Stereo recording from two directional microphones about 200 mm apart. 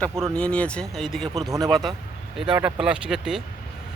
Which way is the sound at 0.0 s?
5° left (ahead or behind).